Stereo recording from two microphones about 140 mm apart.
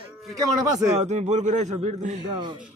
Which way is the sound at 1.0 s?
55° right (ahead or behind).